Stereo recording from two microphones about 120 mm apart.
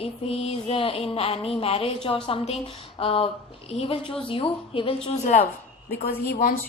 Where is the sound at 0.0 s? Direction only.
55° left (ahead or behind); by 5.5 s 80° left.